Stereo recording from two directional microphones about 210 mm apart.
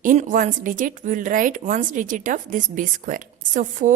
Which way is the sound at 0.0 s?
40° right (ahead or behind).